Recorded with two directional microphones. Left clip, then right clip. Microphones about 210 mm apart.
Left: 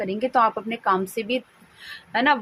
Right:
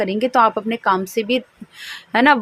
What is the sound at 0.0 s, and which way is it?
A woman's voice, 25° right (ahead or behind).